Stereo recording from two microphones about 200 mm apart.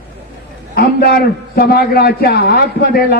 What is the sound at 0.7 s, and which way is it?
A man's voice, 50° left (ahead or behind).